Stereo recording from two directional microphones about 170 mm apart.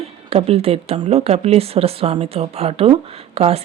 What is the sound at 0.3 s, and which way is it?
Speech, 35° right (ahead or behind).